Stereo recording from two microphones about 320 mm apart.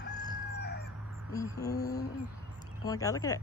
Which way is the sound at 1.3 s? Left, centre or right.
Centre.